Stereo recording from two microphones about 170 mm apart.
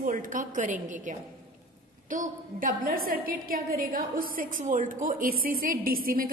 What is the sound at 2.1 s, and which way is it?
A woman's voice, 50° right (ahead or behind).